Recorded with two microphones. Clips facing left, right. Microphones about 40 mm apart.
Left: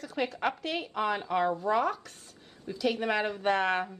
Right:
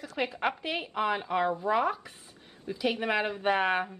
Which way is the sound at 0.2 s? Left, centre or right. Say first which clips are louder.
Even; centre.